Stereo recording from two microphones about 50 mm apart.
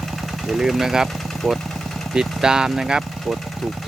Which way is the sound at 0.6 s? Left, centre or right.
Centre.